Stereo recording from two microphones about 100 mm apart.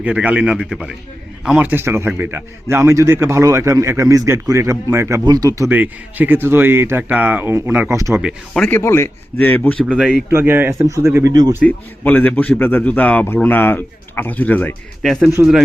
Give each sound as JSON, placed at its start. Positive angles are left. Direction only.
{"t": 0.0, "sound": "a man's voice", "side_deg": -15}
{"t": 1.5, "sound": "a man's voice", "side_deg": -20}
{"t": 5.2, "sound": "speech", "side_deg": -40}
{"t": 5.5, "sound": "a man's voice", "side_deg": -20}
{"t": 8.7, "sound": "a man's voice", "side_deg": 25}
{"t": 9.8, "sound": "a man's voice", "side_deg": -10}
{"t": 10.2, "sound": "a man's voice", "side_deg": -20}
{"t": 11.3, "sound": "speech", "side_deg": -40}
{"t": 11.6, "sound": "a man's voice", "side_deg": 15}
{"t": 15.0, "sound": "speech", "side_deg": 0}